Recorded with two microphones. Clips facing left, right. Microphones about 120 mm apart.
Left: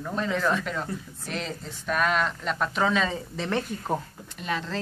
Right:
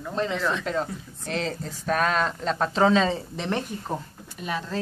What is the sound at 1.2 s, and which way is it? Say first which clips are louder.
Speech: right 6 dB; 30° right (ahead or behind).